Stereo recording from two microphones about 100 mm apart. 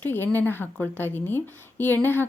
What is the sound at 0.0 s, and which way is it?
A woman's voice, 20° left (ahead or behind).